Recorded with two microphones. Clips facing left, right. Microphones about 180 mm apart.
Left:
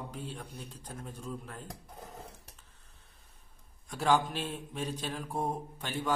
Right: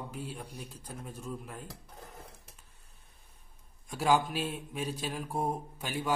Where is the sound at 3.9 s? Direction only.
10° right (ahead or behind).